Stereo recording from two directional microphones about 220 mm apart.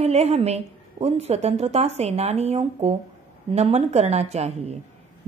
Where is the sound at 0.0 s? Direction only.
30° right (ahead or behind).